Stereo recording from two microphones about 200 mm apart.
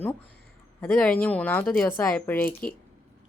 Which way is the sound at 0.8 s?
5° left (ahead or behind).